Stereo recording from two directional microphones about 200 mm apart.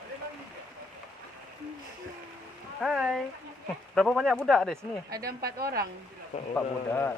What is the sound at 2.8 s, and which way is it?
Speech, centre (ahead or behind).